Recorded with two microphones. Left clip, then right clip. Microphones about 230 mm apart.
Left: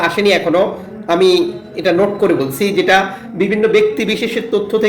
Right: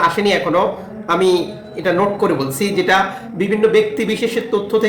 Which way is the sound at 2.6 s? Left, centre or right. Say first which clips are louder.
Left 2 dB; centre.